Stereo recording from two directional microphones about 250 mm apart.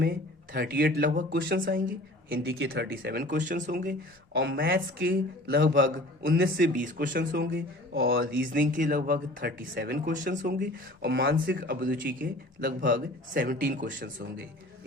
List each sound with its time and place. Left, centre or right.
0.0 s speech: right
1.4 s a man's voice: right
1.6 s a woman's voice: right
2.5 s a man's voice: right
6.6 s speech: right